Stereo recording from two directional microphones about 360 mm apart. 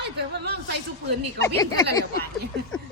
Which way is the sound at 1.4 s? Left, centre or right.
Centre.